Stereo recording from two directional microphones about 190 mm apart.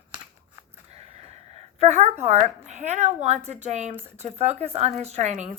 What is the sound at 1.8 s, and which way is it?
A woman's voice, 35° right (ahead or behind).